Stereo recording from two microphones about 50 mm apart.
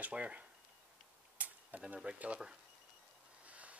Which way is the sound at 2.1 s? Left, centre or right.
Right.